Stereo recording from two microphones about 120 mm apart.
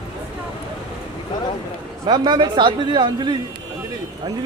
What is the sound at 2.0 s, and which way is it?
Speech, 35° right (ahead or behind).